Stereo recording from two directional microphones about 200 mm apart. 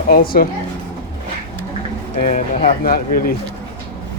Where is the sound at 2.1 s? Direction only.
40° left (ahead or behind).